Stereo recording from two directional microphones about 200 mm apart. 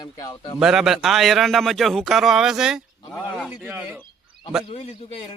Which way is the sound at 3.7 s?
10° right (ahead or behind).